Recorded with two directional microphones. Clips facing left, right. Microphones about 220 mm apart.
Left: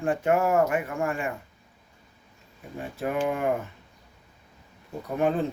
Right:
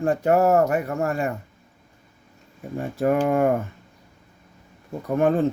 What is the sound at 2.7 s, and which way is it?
Speech, 45° right (ahead or behind).